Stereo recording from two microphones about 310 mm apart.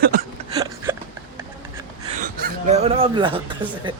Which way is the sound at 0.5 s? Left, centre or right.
Centre.